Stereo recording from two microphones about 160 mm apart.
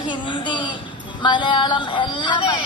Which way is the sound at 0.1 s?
30° left (ahead or behind).